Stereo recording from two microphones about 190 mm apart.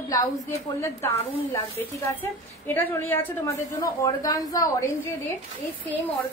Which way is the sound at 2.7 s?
10° left (ahead or behind).